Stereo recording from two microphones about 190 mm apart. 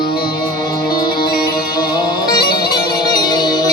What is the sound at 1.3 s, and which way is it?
Music, 20° left (ahead or behind).